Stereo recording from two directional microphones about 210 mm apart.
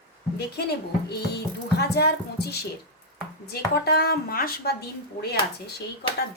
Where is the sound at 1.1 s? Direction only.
50° left (ahead or behind).